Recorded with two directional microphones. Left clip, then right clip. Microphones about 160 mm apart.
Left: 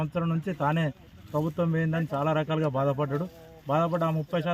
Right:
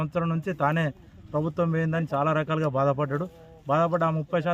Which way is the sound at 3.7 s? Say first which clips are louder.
Right 3 dB; 25° right (ahead or behind).